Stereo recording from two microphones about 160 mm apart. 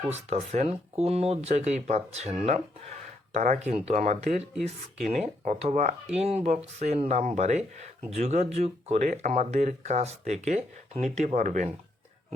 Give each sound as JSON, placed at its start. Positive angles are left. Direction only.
{"t": 0.1, "sound": "speech", "side_deg": -45}
{"t": 5.5, "sound": "speech", "side_deg": -45}